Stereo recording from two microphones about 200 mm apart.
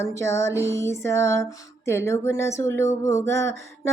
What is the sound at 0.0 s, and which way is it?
Speech, 15° left (ahead or behind).